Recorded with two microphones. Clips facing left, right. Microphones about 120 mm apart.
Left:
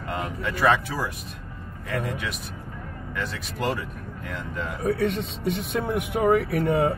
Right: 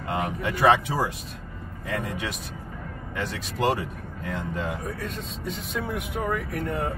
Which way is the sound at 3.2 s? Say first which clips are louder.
Right 2 dB; 25° right (ahead or behind).